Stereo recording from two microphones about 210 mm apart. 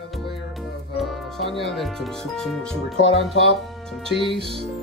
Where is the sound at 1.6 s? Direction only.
Centre (ahead or behind).